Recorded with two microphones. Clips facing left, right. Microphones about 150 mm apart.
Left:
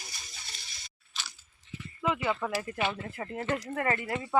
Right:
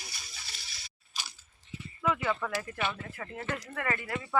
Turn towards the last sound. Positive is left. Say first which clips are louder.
# left 3 dB
turn(degrees=25)  # may be behind; listen again after turning